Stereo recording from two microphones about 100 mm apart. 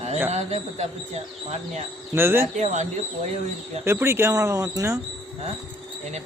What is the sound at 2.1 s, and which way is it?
Speech, 20° right (ahead or behind).